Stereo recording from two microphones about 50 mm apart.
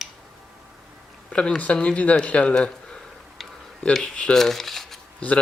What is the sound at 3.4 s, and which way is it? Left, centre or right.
Tick-tock, centre.